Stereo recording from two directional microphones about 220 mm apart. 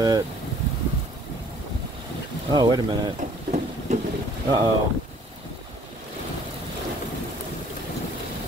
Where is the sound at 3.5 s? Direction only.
30° right (ahead or behind).